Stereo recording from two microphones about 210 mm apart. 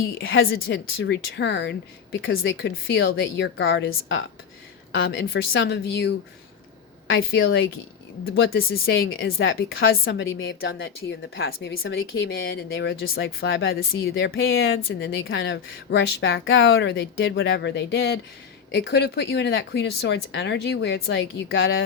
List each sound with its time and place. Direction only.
0.2 s speech: 70° left (ahead or behind)
0.4 s speech: 55° left (ahead or behind)
2.2 s speech: 65° left (ahead or behind)
4.9 s speech: 55° left (ahead or behind)
8.4 s speech: 45° left (ahead or behind)
8.9 s speech: 65° left (ahead or behind)
9.9 s speech: 50° left (ahead or behind); by 13.7 s 65° left (ahead or behind)
14.1 s speech: 50° left (ahead or behind)
14.3 s speech: 70° left (ahead or behind)